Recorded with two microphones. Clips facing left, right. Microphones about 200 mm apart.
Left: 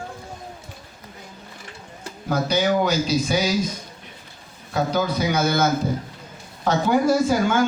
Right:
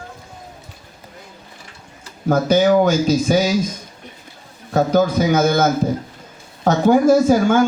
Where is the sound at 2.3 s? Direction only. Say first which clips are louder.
Right 7 dB; 45° right (ahead or behind).